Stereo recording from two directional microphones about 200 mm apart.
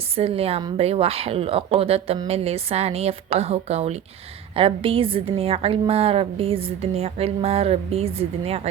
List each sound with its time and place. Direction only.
0.2 s a woman's voice: 30° right (ahead or behind)